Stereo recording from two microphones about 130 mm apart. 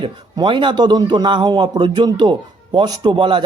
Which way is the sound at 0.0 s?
40° right (ahead or behind).